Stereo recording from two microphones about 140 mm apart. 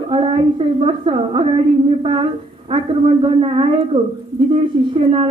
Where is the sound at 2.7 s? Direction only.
40° right (ahead or behind).